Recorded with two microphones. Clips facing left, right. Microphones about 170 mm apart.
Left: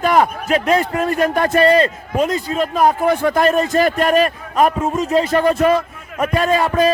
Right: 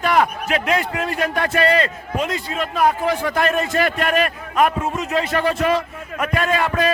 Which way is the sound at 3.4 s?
35° left (ahead or behind).